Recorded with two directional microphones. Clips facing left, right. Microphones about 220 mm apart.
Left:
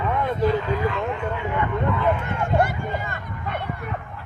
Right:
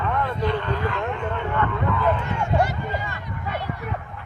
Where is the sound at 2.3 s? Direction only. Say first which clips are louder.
Left 1 dB; 55° left (ahead or behind).